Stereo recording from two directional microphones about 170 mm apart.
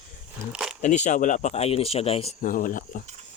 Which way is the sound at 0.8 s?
45° left (ahead or behind).